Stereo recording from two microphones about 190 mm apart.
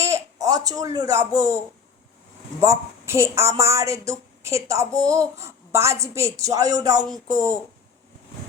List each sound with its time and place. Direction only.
0.0 s speech: 15° right (ahead or behind)
2.6 s a woman's voice: 15° right (ahead or behind)